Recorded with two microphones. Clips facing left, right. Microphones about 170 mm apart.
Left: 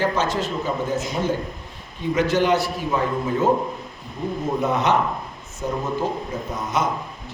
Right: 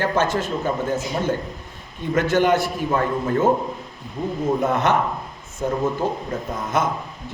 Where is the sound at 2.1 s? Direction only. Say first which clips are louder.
Right 1 dB; 50° right (ahead or behind).